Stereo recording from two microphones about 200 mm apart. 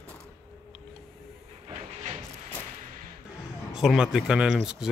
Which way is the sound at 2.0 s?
40° right (ahead or behind).